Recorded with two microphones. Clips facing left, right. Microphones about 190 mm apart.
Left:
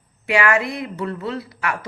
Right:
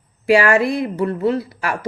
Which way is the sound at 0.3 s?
35° right (ahead or behind).